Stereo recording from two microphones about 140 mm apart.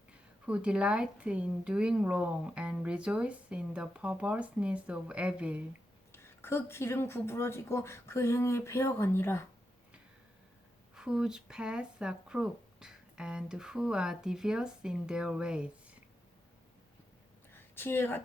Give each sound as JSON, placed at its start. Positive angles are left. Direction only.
{"t": 0.1, "sound": "a woman's voice", "side_deg": -10}
{"t": 6.1, "sound": "speech", "side_deg": 15}
{"t": 10.9, "sound": "speech", "side_deg": -5}
{"t": 17.5, "sound": "a sound", "side_deg": 15}